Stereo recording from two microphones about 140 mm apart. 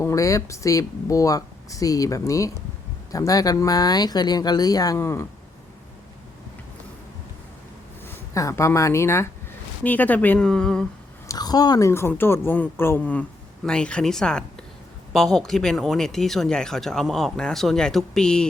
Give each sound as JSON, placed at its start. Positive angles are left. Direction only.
{"t": 0.0, "sound": "speech", "side_deg": 20}
{"t": 8.0, "sound": "a woman's voice", "side_deg": 20}
{"t": 11.3, "sound": "a woman's voice", "side_deg": 30}